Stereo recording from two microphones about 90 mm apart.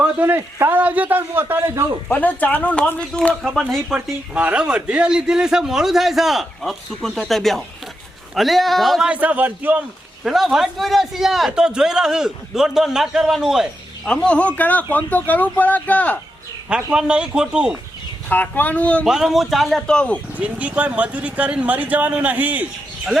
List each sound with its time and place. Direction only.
0.0 s a man's voice: 25° right (ahead or behind)
1.7 s a man's voice: 35° right (ahead or behind)
2.0 s a man's voice: 15° left (ahead or behind)
3.9 s a man's voice: 15° right (ahead or behind); by 9.0 s centre (ahead or behind)
9.0 s speech: 15° right (ahead or behind)
10.2 s a man's voice: 5° right (ahead or behind)
14.1 s speech: 10° left (ahead or behind)
16.6 s speech: 10° right (ahead or behind)
18.3 s speech: 20° left (ahead or behind)
19.0 s a man's voice: 5° right (ahead or behind)
20.4 s speech: 15° right (ahead or behind)